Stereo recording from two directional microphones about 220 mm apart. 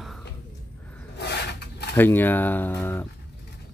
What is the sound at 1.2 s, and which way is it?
Rub, 50° left (ahead or behind).